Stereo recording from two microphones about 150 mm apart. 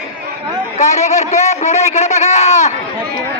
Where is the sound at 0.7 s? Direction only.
50° left (ahead or behind).